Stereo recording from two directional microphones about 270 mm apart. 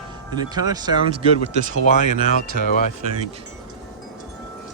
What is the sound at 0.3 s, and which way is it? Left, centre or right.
Speech, centre.